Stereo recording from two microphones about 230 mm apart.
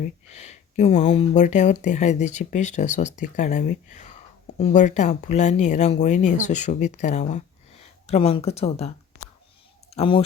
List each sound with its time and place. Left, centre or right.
0.0 s speech: left
9.9 s speech: left